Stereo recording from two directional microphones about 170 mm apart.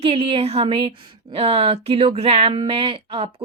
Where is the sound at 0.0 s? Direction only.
30° right (ahead or behind).